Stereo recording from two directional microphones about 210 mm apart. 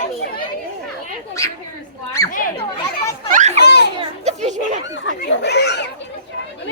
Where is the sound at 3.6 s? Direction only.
50° left (ahead or behind).